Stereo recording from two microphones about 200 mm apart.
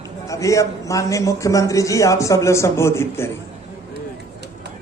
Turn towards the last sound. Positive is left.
turn(degrees=15)  # may be behind; listen again after turning